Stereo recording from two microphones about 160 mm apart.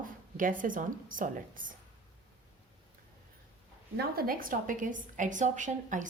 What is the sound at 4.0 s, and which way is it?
A woman's voice, 65° right (ahead or behind).